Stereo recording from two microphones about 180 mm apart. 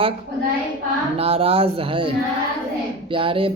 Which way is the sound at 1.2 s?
30° right (ahead or behind).